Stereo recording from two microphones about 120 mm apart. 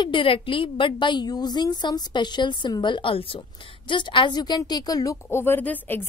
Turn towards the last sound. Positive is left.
turn(degrees=15)  # may be behind; listen again after turning